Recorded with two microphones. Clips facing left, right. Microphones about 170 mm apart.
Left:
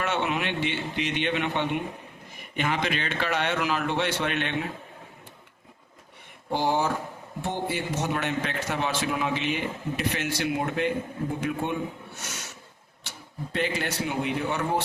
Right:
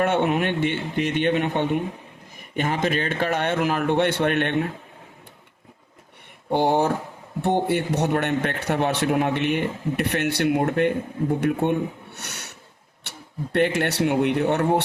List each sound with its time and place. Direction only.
0.0 s a man's voice: 50° right (ahead or behind)
6.5 s a man's voice: 60° right (ahead or behind)